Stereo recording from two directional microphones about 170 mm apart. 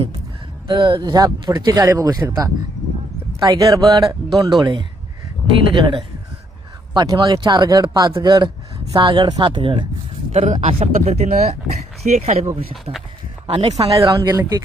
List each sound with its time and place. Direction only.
0.7 s speech: 25° right (ahead or behind)